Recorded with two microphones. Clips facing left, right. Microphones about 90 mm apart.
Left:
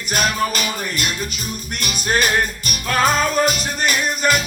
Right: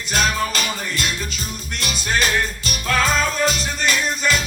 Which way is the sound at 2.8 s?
50° left (ahead or behind).